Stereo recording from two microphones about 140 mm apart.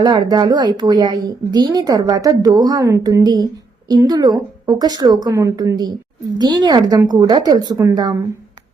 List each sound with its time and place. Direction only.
0.0 s a woman's voice: 30° right (ahead or behind)